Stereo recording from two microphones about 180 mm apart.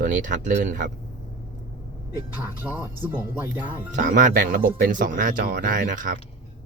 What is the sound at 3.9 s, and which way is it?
Speech, 45° right (ahead or behind).